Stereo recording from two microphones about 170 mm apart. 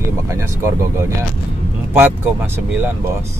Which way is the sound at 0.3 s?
15° right (ahead or behind).